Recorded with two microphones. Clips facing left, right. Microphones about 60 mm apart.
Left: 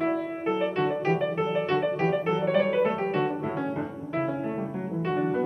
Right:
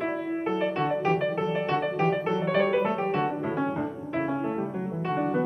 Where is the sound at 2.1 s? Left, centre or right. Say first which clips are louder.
Left 1 dB; centre.